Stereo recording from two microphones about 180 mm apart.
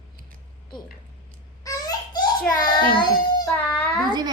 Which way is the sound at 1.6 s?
20° left (ahead or behind).